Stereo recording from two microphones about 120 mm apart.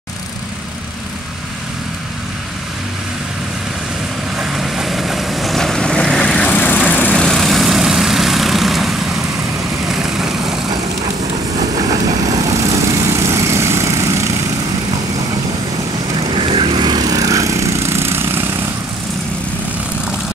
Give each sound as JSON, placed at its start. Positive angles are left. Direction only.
{"t": 4.4, "sound": "vehicle", "side_deg": -5}
{"t": 11.9, "sound": "vehicle", "side_deg": -30}
{"t": 16.2, "sound": "vehicle", "side_deg": -50}